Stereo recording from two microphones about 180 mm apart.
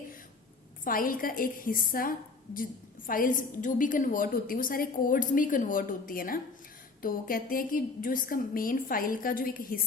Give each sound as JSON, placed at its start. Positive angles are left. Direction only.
{"t": 0.9, "sound": "a woman's voice", "side_deg": 50}